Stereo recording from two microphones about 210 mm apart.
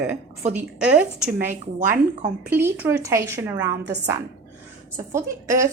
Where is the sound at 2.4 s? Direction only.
10° right (ahead or behind).